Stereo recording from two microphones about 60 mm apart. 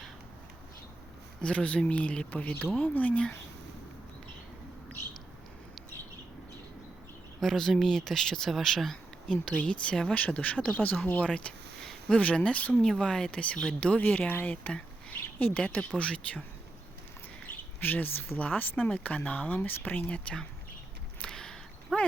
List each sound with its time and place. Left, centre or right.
1.4 s speech: centre
7.3 s speech: centre
9.3 s speech: centre
10.2 s speech: left
11.3 s a sound: centre
11.9 s speech: centre
12.9 s speech: centre
17.5 s speech: left
21.2 s a sound: centre
21.9 s speech: centre